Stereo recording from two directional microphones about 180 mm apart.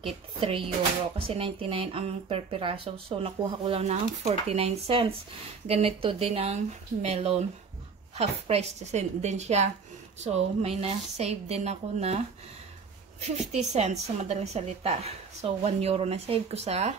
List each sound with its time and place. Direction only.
0.0 s speech: 30° right (ahead or behind)
13.2 s speech: 40° right (ahead or behind)